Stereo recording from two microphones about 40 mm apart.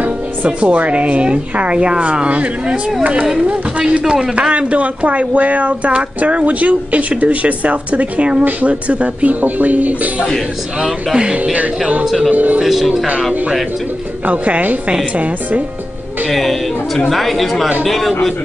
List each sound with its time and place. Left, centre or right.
0.5 s speech: right
4.1 s speech: right
12.3 s speech: right
12.6 s speech: centre
14.2 s speech: right
16.3 s speech: centre